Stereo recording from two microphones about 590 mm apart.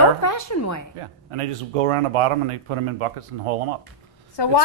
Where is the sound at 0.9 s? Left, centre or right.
Right.